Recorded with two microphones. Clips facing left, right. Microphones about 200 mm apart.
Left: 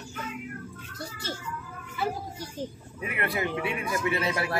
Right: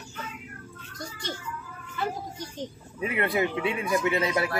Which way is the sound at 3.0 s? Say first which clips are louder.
Right 4 dB; 25° right (ahead or behind).